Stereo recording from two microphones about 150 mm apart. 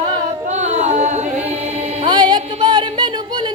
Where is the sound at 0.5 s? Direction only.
50° right (ahead or behind).